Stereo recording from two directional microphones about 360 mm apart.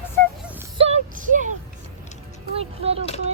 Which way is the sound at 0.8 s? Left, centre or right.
Centre.